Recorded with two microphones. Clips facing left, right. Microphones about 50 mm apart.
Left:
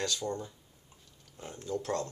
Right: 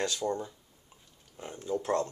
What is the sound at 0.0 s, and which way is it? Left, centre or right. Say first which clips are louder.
Speech: right 3 dB; centre.